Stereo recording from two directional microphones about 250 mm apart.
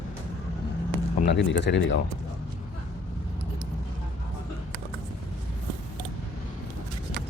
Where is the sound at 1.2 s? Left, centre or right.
Left.